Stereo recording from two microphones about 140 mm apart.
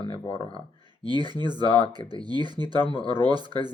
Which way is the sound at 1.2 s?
30° right (ahead or behind).